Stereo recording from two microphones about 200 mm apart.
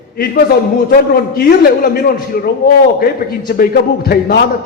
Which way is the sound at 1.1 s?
50° left (ahead or behind).